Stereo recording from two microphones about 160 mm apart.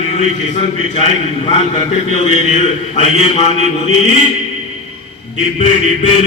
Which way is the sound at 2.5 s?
40° left (ahead or behind).